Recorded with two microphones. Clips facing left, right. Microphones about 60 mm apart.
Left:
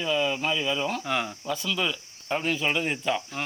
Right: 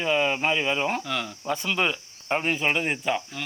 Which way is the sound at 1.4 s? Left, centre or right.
Right.